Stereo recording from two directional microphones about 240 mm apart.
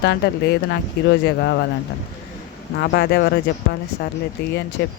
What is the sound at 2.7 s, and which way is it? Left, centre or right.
Speech, left.